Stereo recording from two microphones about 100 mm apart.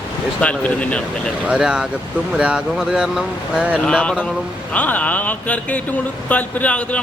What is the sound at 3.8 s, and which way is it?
Speech, 10° left (ahead or behind).